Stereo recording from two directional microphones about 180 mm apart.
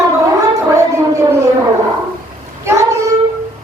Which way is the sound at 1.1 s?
15° right (ahead or behind).